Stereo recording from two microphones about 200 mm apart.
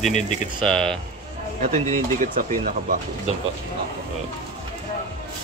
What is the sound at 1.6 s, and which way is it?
Speech, 35° right (ahead or behind).